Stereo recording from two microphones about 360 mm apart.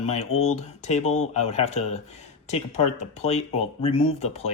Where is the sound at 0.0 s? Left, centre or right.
Centre.